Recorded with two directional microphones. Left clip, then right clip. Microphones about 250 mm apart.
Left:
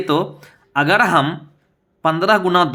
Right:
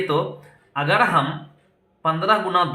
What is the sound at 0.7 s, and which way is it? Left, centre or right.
Speech, left.